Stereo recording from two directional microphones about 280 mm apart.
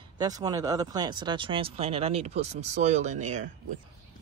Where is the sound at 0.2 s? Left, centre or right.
Centre.